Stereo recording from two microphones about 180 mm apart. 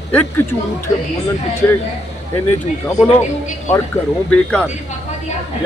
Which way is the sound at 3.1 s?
40° left (ahead or behind).